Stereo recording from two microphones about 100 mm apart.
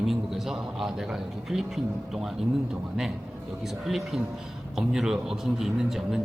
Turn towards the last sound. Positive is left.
turn(degrees=0)  # may be behind; listen again after turning